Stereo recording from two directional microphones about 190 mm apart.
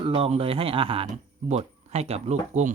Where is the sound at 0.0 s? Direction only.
30° right (ahead or behind).